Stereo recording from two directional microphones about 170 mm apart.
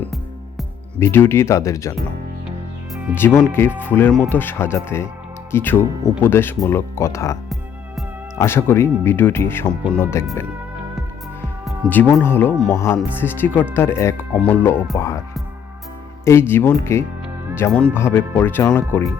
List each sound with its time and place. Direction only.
0.9 s speech: 15° left (ahead or behind)
3.2 s speech: 10° left (ahead or behind)
8.4 s speech: 15° left (ahead or behind)
11.9 s speech: 10° left (ahead or behind)
16.2 s speech: 15° left (ahead or behind)